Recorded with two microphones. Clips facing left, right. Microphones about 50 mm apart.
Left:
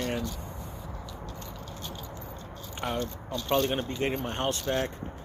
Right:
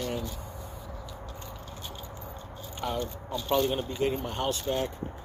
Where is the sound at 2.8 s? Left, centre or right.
Left.